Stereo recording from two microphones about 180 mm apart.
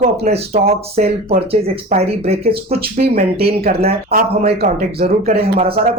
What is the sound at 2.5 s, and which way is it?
Speech, 60° right (ahead or behind).